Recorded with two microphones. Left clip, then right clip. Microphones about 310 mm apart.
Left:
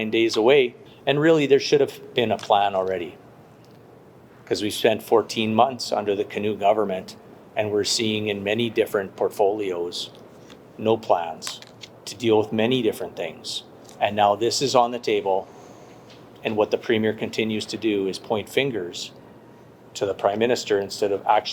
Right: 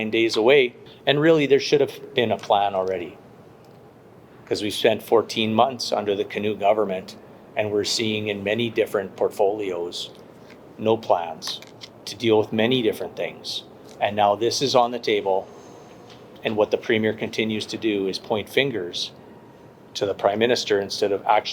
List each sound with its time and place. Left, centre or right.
0.0 s speech: left
4.4 s speech: left